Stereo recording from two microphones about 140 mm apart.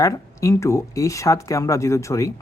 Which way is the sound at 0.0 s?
20° left (ahead or behind).